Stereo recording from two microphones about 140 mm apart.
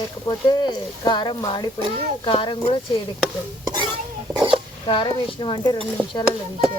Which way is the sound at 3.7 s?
35° right (ahead or behind).